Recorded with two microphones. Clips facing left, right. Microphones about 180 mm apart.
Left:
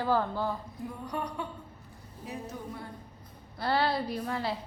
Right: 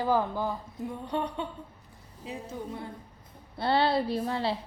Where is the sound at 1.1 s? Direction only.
25° right (ahead or behind).